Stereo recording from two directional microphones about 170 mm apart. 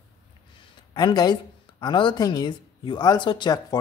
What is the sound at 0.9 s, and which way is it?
Speech, 25° left (ahead or behind).